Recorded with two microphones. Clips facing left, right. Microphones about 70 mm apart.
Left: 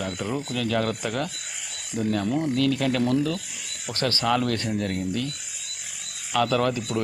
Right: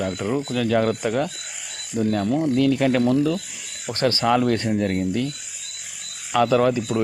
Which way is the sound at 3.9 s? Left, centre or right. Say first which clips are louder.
Right 4 dB; right.